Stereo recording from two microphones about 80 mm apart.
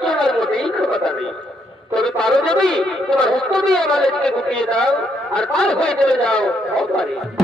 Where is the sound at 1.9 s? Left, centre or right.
Centre.